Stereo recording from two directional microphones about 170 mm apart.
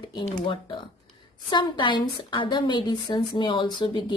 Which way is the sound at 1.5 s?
25° left (ahead or behind).